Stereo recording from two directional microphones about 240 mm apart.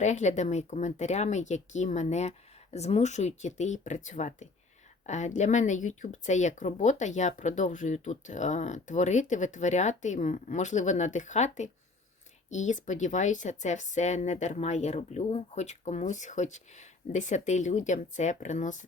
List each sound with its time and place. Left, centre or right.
0.0 s speech: left